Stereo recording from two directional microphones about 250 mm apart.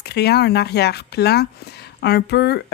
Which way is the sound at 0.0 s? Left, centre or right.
Left.